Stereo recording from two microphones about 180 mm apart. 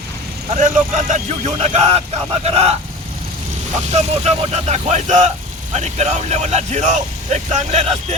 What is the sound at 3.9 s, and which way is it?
Speech, 35° right (ahead or behind).